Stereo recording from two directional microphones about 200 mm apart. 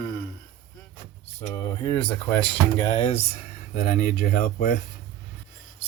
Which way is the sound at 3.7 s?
45° left (ahead or behind).